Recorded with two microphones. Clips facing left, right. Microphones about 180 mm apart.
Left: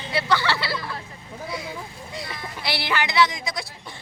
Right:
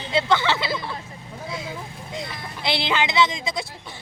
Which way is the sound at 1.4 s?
25° right (ahead or behind).